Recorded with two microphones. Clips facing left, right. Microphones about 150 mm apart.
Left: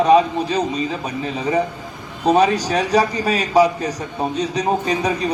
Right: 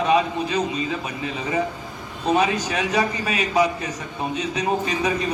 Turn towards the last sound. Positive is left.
turn(degrees=35)  # may be behind; listen again after turning